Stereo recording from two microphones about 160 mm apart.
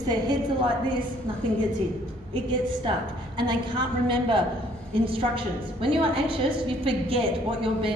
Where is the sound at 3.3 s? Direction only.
30° right (ahead or behind).